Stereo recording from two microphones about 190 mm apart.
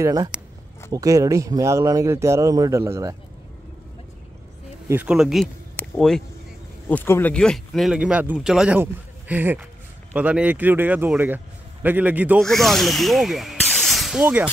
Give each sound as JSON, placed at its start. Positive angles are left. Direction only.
{"t": 0.0, "sound": "speech", "side_deg": -20}
{"t": 4.8, "sound": "speech", "side_deg": -10}
{"t": 12.4, "sound": "speech", "side_deg": 0}